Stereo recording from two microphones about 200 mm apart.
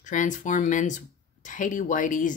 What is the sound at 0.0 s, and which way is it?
Speech, 40° left (ahead or behind).